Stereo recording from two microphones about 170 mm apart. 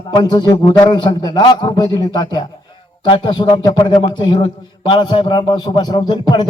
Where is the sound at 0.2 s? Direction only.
25° left (ahead or behind).